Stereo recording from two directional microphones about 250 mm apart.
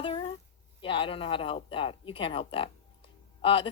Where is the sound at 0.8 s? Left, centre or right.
Centre.